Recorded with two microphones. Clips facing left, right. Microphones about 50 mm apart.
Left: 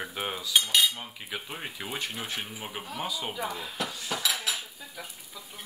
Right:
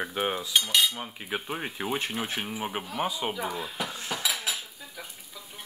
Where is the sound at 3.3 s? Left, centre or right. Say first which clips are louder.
Right 1 dB; centre.